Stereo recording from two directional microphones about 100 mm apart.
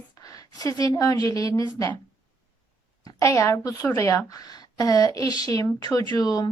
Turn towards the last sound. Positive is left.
turn(degrees=40)  # may be behind; listen again after turning